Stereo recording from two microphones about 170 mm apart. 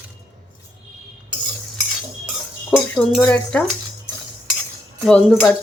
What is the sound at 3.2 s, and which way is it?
Speech, 10° left (ahead or behind).